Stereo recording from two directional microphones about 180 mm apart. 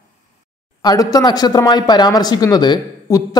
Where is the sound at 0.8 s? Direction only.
20° left (ahead or behind).